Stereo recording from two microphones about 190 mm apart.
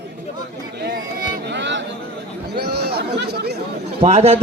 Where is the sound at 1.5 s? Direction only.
70° right (ahead or behind).